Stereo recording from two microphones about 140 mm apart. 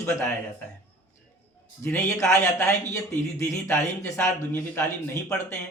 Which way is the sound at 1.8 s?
15° left (ahead or behind).